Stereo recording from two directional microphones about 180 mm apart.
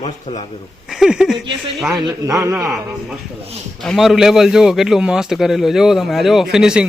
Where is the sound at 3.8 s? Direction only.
Centre (ahead or behind).